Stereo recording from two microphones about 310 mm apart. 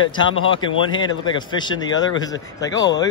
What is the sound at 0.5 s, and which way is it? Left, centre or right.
A man's voice, centre.